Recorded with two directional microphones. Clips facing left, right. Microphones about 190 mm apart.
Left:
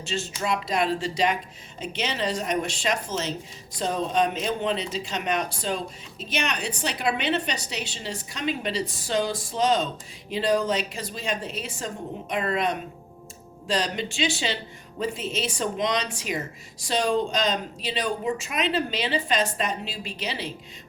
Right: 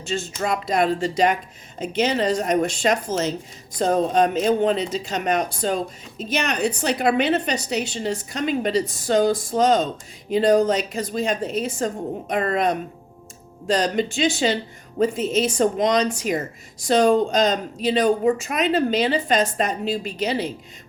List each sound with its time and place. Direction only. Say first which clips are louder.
0.1 s speech: right 3 dB; 45° right (ahead or behind)